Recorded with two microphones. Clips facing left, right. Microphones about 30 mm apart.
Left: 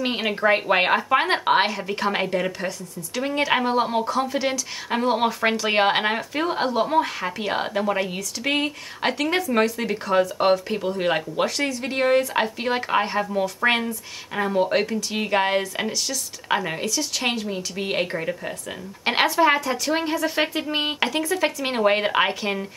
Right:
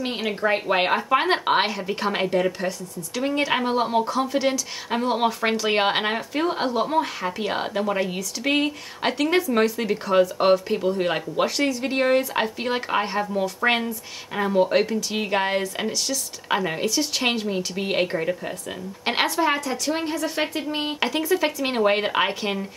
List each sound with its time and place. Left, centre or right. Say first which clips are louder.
0.0 s speech: left 3 dB; left
11.4 s speech: right 1 dB; centre
16.8 s speech: right 2 dB; centre
17.7 s a woman's voice: even; centre
21.0 s speech: right 4 dB; centre